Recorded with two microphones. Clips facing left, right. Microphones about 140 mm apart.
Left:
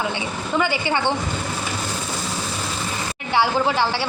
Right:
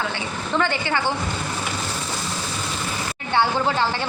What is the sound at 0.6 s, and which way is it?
Speech, 15° left (ahead or behind).